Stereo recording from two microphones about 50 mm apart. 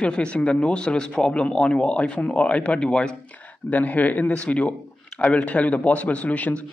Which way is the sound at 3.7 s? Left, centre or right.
Left.